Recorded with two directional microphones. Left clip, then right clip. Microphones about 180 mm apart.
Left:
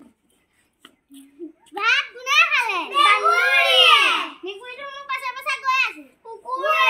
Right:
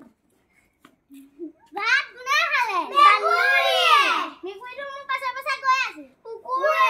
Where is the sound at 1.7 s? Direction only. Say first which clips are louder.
Left 2 dB; 25° right (ahead or behind).